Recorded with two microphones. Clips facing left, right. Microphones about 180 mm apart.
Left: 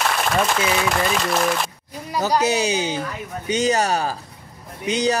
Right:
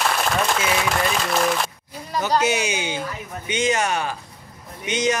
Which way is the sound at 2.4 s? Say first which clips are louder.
Left 2 dB; 35° left (ahead or behind).